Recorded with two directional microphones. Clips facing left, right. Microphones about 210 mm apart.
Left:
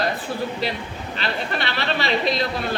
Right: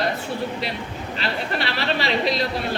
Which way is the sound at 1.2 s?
30° right (ahead or behind).